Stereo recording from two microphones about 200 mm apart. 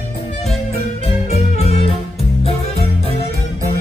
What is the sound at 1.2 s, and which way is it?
Music, 30° left (ahead or behind).